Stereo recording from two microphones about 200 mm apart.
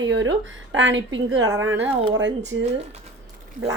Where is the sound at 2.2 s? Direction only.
65° right (ahead or behind).